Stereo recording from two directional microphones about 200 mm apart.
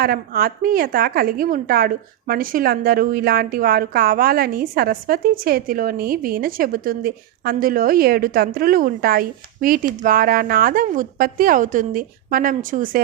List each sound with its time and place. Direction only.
0.0 s a woman's voice: 45° right (ahead or behind)